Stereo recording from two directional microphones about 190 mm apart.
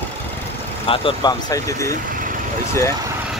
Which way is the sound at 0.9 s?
25° left (ahead or behind).